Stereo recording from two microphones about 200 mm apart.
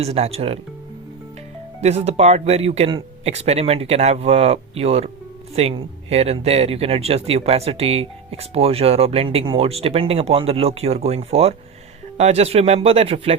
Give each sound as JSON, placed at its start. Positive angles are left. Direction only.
{"t": 0.0, "sound": "speech", "side_deg": -30}
{"t": 1.8, "sound": "speech", "side_deg": -30}